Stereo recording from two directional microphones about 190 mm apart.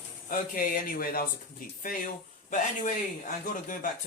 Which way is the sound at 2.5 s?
45° left (ahead or behind).